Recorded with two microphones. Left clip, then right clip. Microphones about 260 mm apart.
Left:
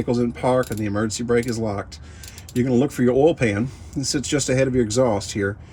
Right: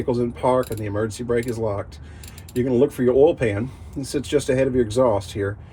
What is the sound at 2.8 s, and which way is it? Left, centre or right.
Mechanisms, left.